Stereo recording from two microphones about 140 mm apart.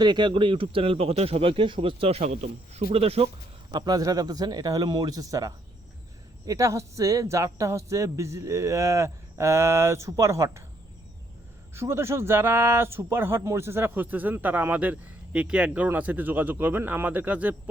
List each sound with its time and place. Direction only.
0.0 s speech: 30° right (ahead or behind)
3.7 s speech: 30° right (ahead or behind)
11.7 s speech: 20° right (ahead or behind)